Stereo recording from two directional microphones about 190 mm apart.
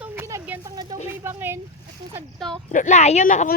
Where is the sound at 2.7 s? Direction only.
40° left (ahead or behind).